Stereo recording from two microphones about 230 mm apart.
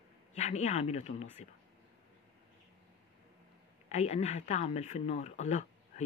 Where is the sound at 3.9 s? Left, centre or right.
Left.